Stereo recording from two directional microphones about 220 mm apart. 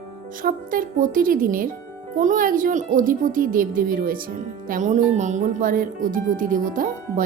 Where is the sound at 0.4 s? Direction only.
40° right (ahead or behind).